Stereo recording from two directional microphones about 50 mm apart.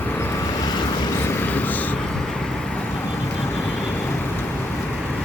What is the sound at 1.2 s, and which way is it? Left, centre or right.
Vehicle, left.